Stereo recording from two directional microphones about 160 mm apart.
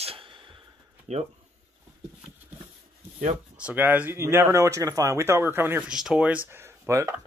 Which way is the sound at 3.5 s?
10° right (ahead or behind).